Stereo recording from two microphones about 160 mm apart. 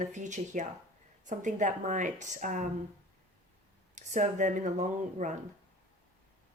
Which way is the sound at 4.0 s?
50° right (ahead or behind).